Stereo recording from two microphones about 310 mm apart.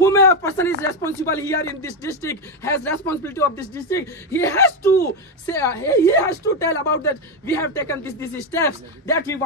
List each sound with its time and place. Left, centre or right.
0.0 s speech: centre